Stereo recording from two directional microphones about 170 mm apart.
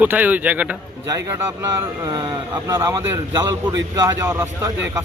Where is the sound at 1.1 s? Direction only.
20° right (ahead or behind).